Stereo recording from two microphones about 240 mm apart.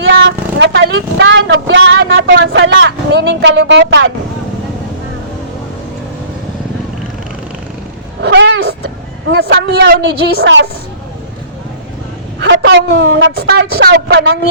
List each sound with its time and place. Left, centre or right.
0.0 s speech: right
8.2 s cat: right
9.4 s a man's voice: right
12.4 s a man's voice: right